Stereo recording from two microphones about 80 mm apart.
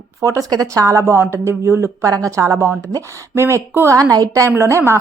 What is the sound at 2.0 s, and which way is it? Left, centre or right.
Speech, right.